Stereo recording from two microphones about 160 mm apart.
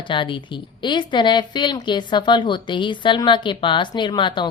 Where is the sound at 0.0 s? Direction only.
30° left (ahead or behind).